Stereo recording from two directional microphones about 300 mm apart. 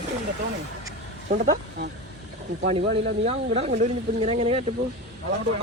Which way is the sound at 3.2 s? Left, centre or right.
Right.